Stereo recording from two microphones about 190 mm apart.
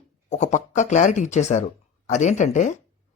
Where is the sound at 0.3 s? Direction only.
40° left (ahead or behind).